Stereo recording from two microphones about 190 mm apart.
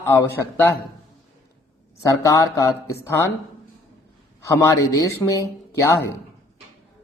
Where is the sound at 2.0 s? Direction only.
15° left (ahead or behind).